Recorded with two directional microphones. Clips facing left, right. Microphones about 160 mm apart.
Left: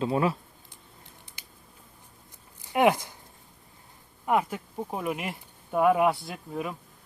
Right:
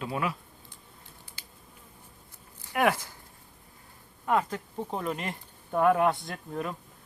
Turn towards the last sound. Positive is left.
turn(degrees=5)  # may be behind; listen again after turning